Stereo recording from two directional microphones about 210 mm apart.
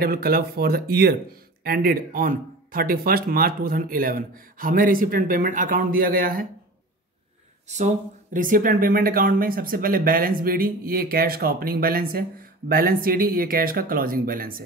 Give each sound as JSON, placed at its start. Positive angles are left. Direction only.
{"t": 0.0, "sound": "speech", "side_deg": -45}
{"t": 7.6, "sound": "speech", "side_deg": -35}